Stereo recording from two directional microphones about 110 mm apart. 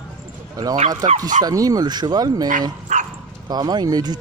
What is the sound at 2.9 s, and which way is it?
Dog, 90° right.